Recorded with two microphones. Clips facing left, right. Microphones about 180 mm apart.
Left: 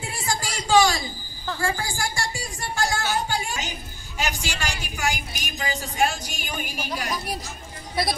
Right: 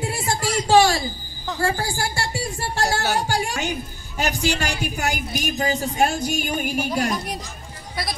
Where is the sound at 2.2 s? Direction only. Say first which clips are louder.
Right 4 dB; 65° right (ahead or behind).